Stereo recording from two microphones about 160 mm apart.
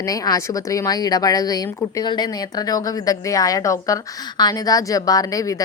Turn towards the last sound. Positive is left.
turn(degrees=20)  # may be behind; listen again after turning